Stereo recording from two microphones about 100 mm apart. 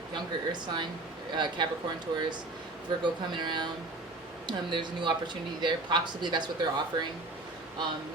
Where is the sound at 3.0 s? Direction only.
50° right (ahead or behind).